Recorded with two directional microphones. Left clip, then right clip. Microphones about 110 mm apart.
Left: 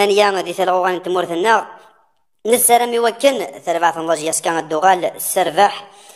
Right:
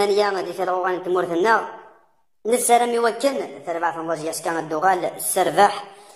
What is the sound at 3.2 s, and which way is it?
A woman's voice, 40° left (ahead or behind).